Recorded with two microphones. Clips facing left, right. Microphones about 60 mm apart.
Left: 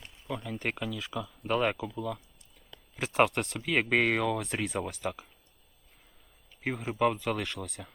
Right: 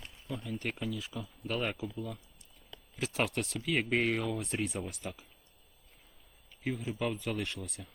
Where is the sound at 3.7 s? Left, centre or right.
Left.